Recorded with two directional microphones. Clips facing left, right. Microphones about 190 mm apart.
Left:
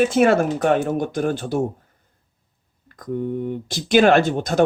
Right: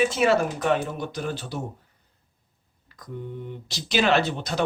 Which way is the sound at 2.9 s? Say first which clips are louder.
Left 11 dB; 50° left (ahead or behind).